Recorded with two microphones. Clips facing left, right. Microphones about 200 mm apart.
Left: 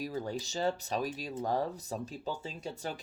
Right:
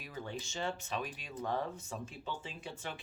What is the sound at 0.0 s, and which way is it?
Speech, 40° left (ahead or behind).